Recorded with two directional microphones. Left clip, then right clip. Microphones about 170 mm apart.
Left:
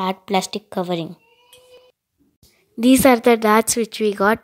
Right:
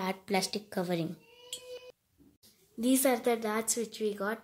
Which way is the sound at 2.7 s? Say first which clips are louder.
Left 14 dB; 60° left (ahead or behind).